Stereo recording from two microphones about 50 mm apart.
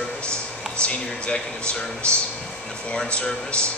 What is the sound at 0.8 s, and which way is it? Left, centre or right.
Speech, left.